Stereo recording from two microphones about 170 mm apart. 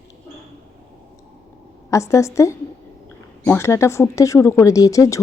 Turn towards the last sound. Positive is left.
turn(degrees=20)  # may be behind; listen again after turning